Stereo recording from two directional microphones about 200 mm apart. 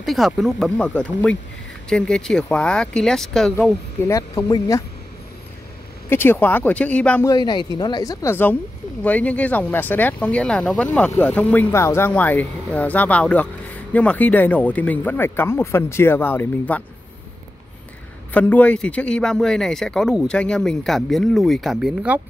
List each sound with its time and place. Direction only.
0.0 s speech: centre (ahead or behind)
4.1 s speech: 15° left (ahead or behind)
6.0 s speech: 10° left (ahead or behind)
7.2 s speech: 20° left (ahead or behind)
18.3 s speech: 5° left (ahead or behind)